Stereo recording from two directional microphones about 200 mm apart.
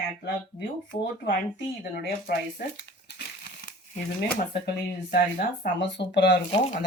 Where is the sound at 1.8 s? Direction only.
50° left (ahead or behind).